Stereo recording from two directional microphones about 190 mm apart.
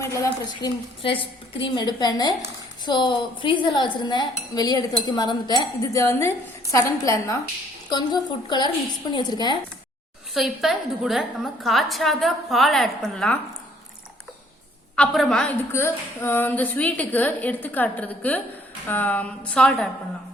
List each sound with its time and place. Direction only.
0.0 s speech: 15° left (ahead or behind)
10.3 s a woman's voice: centre (ahead or behind)
14.9 s a woman's voice: 5° left (ahead or behind)
15.7 s a woman's voice: 15° left (ahead or behind)